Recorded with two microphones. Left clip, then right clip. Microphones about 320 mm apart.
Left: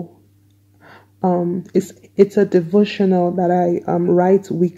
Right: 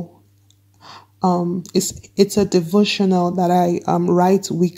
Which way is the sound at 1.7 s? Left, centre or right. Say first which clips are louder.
Left 1 dB; right.